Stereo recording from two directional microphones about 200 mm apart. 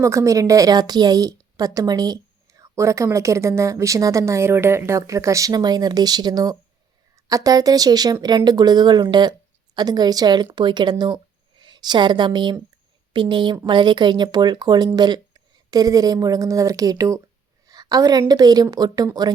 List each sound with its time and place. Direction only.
0.0 s a woman's voice: 15° right (ahead or behind)